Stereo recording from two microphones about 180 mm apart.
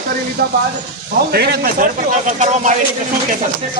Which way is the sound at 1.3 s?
60° right (ahead or behind).